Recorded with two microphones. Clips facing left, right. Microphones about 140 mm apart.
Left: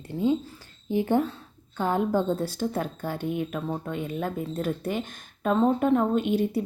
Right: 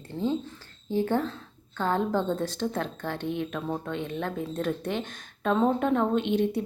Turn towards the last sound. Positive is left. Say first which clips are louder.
# left 1 dB
turn(degrees=5)  # may be behind; listen again after turning